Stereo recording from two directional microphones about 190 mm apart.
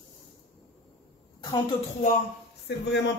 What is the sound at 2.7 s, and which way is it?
Speech, 60° left (ahead or behind).